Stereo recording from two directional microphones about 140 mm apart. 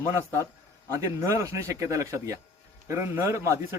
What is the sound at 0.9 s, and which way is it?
Speech, 20° right (ahead or behind).